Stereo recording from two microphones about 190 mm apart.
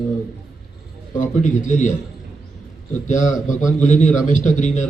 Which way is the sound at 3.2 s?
40° left (ahead or behind).